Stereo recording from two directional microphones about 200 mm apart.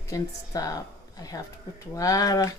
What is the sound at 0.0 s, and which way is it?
Speech, 15° left (ahead or behind).